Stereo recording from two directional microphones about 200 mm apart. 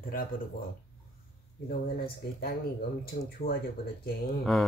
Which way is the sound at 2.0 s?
50° left (ahead or behind).